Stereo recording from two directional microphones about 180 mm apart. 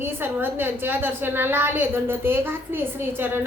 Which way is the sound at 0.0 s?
10° right (ahead or behind).